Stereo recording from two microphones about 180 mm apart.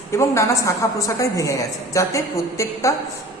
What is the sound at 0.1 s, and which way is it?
A woman's voice, 15° left (ahead or behind).